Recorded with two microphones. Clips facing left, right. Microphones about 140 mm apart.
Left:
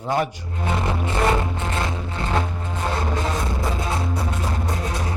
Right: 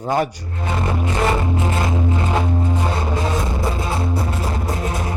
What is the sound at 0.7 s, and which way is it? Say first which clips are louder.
Music: right 2 dB; 5° right (ahead or behind).